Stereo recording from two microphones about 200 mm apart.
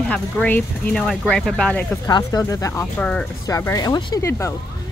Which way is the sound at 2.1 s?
20° left (ahead or behind).